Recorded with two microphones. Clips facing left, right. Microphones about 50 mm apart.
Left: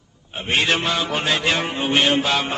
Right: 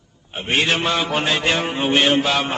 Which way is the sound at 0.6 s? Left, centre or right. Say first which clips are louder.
Right 1 dB; centre.